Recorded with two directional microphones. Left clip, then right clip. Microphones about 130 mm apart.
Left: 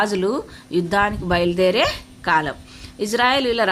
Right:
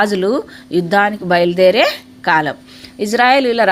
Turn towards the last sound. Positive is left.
turn(degrees=-20)  # may be behind; listen again after turning